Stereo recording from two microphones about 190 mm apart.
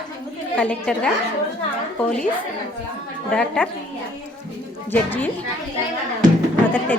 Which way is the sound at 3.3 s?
5° left (ahead or behind).